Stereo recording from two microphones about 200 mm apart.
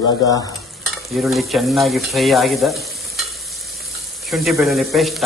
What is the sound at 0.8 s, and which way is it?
Stir, centre (ahead or behind).